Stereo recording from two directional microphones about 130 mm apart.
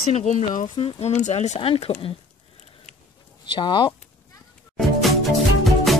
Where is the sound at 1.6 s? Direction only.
45° left (ahead or behind).